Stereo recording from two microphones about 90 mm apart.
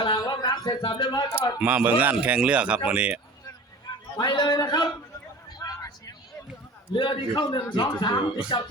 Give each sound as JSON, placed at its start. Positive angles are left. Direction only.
{"t": 0.0, "sound": "a sound", "side_deg": 55}
{"t": 0.8, "sound": "a man's voice", "side_deg": 60}
{"t": 1.6, "sound": "speech", "side_deg": -20}
{"t": 4.2, "sound": "speech", "side_deg": 55}
{"t": 5.5, "sound": "vehicle", "side_deg": 45}
{"t": 6.9, "sound": "a man's voice", "side_deg": 60}